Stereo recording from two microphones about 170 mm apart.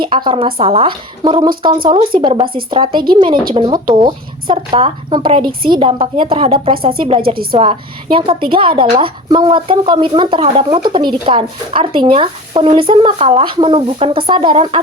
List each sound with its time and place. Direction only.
0.0 s speech: 30° right (ahead or behind)